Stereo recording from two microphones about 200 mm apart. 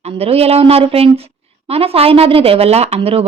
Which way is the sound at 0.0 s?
30° right (ahead or behind).